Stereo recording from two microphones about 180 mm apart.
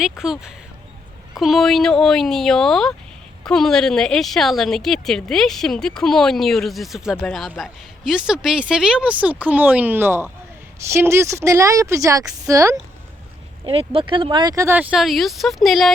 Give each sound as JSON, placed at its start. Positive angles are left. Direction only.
{"t": 0.0, "sound": "a woman's voice", "side_deg": -5}
{"t": 13.7, "sound": "speech", "side_deg": -30}